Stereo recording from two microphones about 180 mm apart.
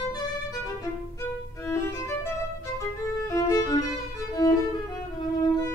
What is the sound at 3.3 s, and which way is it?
Violin, 20° left (ahead or behind).